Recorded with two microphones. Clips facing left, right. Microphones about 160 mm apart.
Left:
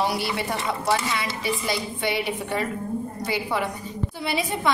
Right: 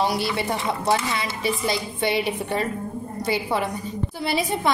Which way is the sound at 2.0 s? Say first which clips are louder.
Right 3 dB; 30° right (ahead or behind).